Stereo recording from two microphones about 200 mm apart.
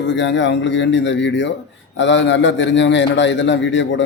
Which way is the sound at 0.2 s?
65° left (ahead or behind).